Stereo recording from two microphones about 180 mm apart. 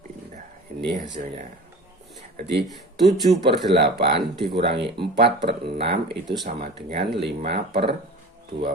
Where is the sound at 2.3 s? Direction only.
70° right (ahead or behind).